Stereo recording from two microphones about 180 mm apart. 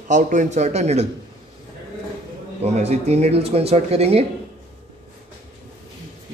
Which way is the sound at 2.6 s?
35° right (ahead or behind).